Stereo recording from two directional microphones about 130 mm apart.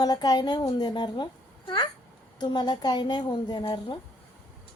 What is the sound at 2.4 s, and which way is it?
A woman's voice, 35° left (ahead or behind).